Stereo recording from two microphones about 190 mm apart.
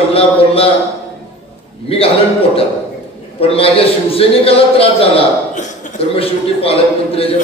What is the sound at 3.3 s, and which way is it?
A man's voice, 30° left (ahead or behind).